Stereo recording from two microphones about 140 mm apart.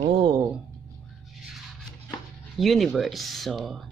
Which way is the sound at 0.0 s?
40° right (ahead or behind).